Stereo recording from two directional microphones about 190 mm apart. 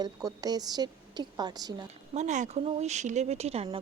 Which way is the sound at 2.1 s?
40° right (ahead or behind).